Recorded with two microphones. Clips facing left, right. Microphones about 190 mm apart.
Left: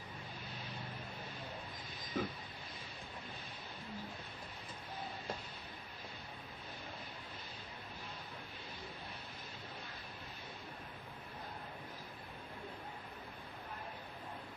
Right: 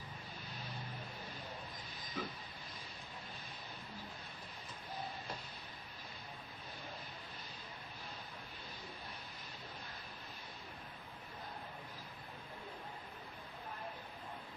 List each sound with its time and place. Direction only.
2.2 s train: 50° left (ahead or behind)